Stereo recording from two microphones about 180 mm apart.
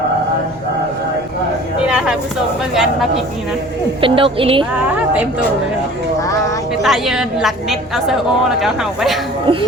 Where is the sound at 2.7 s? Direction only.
Centre (ahead or behind).